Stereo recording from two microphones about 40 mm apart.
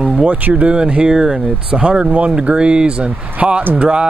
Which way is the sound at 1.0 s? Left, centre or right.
Centre.